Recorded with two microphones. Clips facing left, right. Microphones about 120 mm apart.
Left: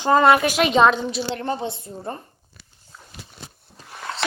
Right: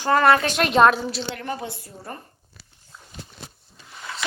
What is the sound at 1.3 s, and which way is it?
Speech, 30° left (ahead or behind).